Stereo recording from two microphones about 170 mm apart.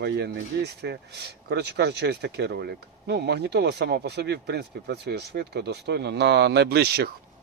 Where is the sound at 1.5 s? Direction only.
80° right.